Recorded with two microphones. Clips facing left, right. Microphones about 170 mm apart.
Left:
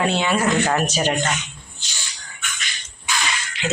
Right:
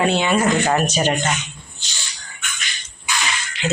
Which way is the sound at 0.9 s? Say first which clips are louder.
Right 2 dB; centre (ahead or behind).